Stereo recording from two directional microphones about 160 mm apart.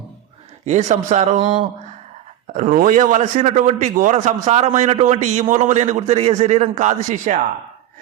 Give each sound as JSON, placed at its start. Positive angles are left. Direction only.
{"t": 0.6, "sound": "a man's voice", "side_deg": -45}
{"t": 2.6, "sound": "a man's voice", "side_deg": -55}